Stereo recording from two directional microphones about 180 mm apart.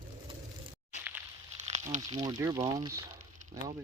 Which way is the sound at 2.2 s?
20° right (ahead or behind).